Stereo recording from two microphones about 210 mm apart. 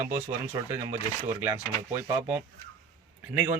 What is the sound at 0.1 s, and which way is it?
Speech, 10° right (ahead or behind).